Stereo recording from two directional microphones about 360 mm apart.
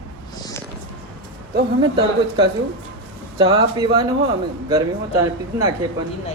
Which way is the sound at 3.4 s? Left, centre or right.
Centre.